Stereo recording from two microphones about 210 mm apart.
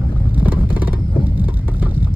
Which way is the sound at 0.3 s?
10° right (ahead or behind).